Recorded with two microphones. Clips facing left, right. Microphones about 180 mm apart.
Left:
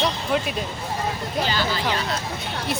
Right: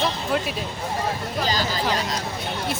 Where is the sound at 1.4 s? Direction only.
40° right (ahead or behind).